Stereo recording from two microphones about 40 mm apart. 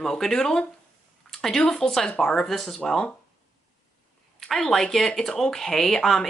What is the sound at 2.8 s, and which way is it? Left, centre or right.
Speech, left.